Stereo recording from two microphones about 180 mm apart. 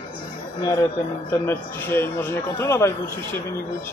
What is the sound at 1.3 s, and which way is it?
A man's voice, 10° left (ahead or behind).